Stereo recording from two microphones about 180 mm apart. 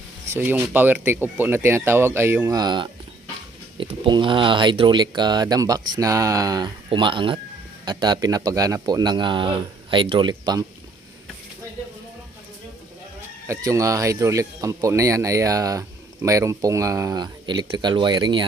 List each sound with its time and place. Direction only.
0.3 s speech: 15° right (ahead or behind)
13.5 s speech: 15° right (ahead or behind)